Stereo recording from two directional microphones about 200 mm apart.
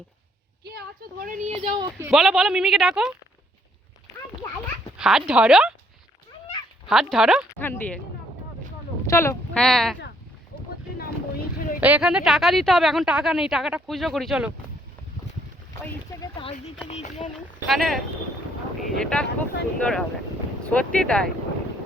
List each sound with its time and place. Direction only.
0.6 s speech: 50° right (ahead or behind)
1.6 s speech: 20° right (ahead or behind)
2.0 s speech: centre (ahead or behind)
4.9 s dog: 5° right (ahead or behind)
5.3 s speech: 5° right (ahead or behind)
6.8 s speech: centre (ahead or behind)
7.6 s speech: 10° left (ahead or behind)
9.0 s speech: 15° left (ahead or behind)
10.9 s a sound: 50° left (ahead or behind)
11.8 s speech: 5° right (ahead or behind)
16.4 s speech: 30° left (ahead or behind)
17.7 s speech: centre (ahead or behind)